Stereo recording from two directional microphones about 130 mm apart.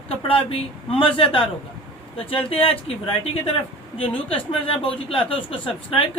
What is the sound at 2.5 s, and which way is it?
Speech, 45° left (ahead or behind).